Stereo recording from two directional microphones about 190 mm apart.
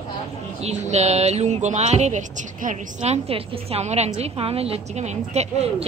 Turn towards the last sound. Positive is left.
turn(degrees=-35)  # may be behind; listen again after turning